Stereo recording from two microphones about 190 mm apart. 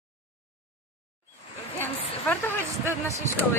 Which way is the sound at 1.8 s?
10° left (ahead or behind).